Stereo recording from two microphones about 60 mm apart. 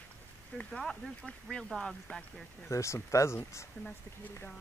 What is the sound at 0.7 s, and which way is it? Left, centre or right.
Speech, centre.